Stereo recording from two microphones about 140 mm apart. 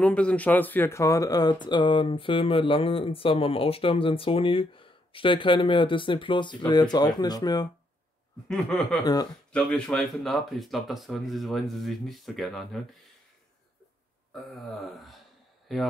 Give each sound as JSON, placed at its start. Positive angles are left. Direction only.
{"t": 0.0, "sound": "speech", "side_deg": 10}
{"t": 8.5, "sound": "speech", "side_deg": 5}
{"t": 9.0, "sound": "speech", "side_deg": 30}
{"t": 9.5, "sound": "speech", "side_deg": 5}
{"t": 14.3, "sound": "a sound", "side_deg": 0}
{"t": 15.7, "sound": "speech", "side_deg": 0}